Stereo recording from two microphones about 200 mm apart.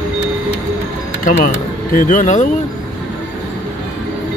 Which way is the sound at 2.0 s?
40° left (ahead or behind).